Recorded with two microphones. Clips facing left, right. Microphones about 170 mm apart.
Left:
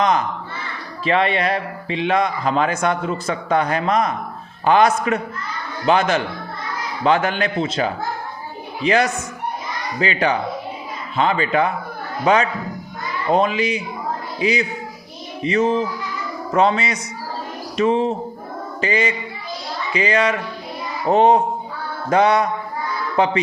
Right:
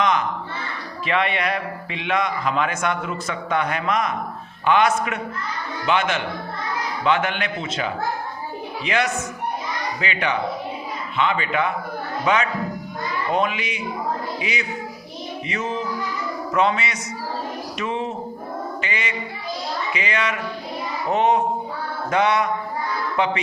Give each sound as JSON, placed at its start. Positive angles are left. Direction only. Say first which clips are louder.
{"t": 0.0, "sound": "crow", "louder": "left 3 dB", "side_deg": 35}
{"t": 1.0, "sound": "speech", "louder": "left 4 dB", "side_deg": 30}
{"t": 23.1, "sound": "music", "louder": "left 5 dB", "side_deg": 35}